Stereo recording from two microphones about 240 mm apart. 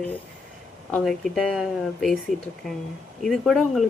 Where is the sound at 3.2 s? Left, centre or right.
Centre.